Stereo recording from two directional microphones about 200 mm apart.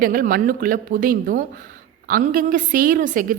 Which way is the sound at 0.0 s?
45° right (ahead or behind).